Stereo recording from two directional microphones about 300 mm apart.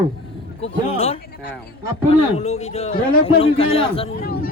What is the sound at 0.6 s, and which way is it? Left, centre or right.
A man's voice, centre.